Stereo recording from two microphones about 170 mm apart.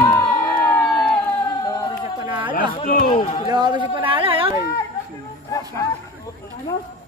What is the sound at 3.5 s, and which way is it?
A man's voice, 25° right (ahead or behind).